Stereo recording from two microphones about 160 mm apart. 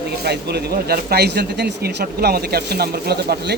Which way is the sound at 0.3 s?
85° right.